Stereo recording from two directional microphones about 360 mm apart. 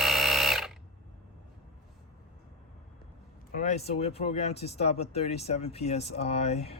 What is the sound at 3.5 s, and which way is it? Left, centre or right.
Speech, centre.